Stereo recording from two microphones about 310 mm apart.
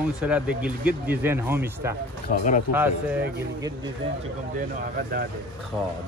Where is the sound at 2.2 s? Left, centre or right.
Left.